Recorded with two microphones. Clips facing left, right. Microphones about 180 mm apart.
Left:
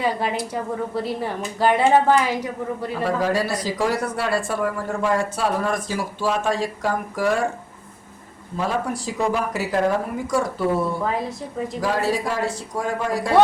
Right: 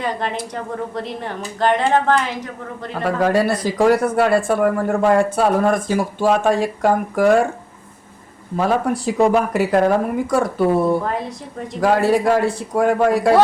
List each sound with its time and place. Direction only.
0.0 s a woman's voice: 10° left (ahead or behind)
3.0 s a man's voice: 55° right (ahead or behind)
8.5 s a man's voice: 60° right (ahead or behind)
11.0 s a woman's voice: centre (ahead or behind)
11.8 s a man's voice: 60° right (ahead or behind)